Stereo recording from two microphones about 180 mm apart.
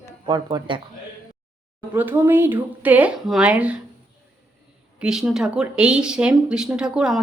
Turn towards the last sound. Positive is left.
turn(degrees=0)  # may be behind; listen again after turning